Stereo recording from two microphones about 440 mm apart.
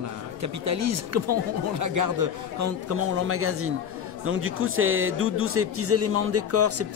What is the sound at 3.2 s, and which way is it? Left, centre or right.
A man's voice, right.